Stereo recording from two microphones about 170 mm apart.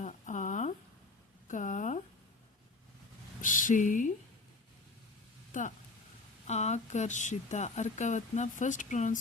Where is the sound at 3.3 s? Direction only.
50° left (ahead or behind).